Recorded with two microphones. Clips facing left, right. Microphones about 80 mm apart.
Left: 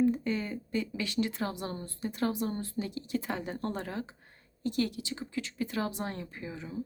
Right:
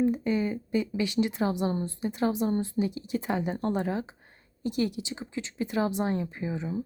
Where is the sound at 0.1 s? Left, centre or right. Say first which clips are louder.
Right 4 dB; centre.